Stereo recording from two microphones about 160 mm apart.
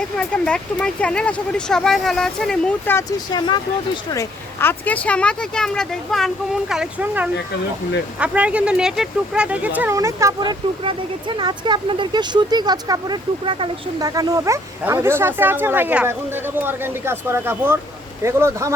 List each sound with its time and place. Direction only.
0.2 s speech: 5° left (ahead or behind)
4.9 s speech: 10° left (ahead or behind); by 18.7 s 15° right (ahead or behind)